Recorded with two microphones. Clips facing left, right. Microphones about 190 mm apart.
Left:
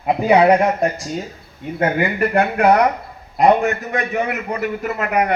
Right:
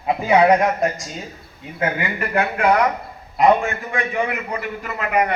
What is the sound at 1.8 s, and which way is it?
A man's voice, 45° left (ahead or behind).